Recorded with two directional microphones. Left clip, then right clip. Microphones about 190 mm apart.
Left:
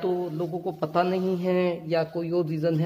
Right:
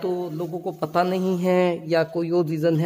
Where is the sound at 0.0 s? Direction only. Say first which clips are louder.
Right 1 dB; 30° right (ahead or behind).